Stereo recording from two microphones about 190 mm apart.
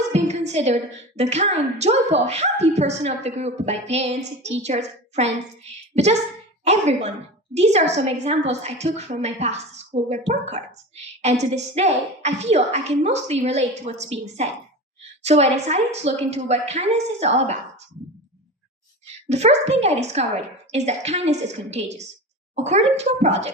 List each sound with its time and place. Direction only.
0.1 s a woman's voice: 35° right (ahead or behind)
19.3 s a woman's voice: 35° right (ahead or behind)